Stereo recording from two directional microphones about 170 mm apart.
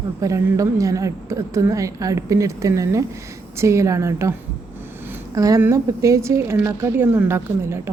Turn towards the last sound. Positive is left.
turn(degrees=-15)  # may be behind; listen again after turning